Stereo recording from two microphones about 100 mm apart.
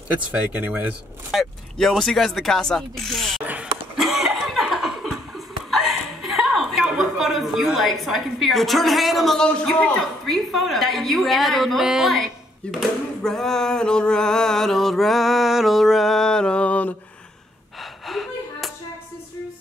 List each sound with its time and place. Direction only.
0.2 s speech: 15° right (ahead or behind)
1.3 s a sound: centre (ahead or behind)
4.0 s cough: 5° right (ahead or behind)
5.7 s a woman's voice: centre (ahead or behind)
12.6 s speech: 10° left (ahead or behind)
13.2 s a sound: 5° left (ahead or behind)
18.0 s gasp: centre (ahead or behind)